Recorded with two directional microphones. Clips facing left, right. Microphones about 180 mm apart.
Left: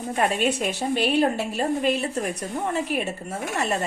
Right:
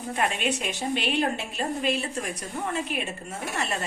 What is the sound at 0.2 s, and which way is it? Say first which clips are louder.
A woman's voice: left 5 dB; 40° left (ahead or behind).